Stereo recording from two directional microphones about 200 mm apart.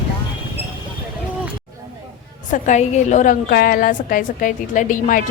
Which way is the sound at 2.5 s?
35° left (ahead or behind).